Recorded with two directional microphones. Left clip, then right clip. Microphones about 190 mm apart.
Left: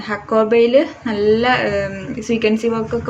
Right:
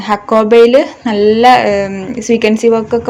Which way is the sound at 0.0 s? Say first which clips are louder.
Right 6 dB; 35° right (ahead or behind).